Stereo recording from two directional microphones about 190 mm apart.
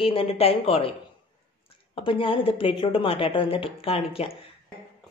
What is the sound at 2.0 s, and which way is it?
Speech, 30° left (ahead or behind).